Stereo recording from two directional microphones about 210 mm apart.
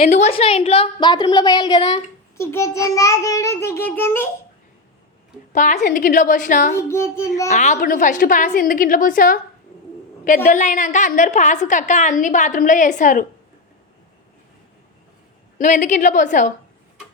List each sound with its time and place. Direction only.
0.0 s a woman's voice: 30° left (ahead or behind); by 4.3 s 10° left (ahead or behind)
5.5 s a woman's voice: 35° left (ahead or behind)
6.7 s a child's voice: 10° left (ahead or behind)
7.5 s a woman's voice: 35° left (ahead or behind)
15.5 s a woman's voice: 35° left (ahead or behind)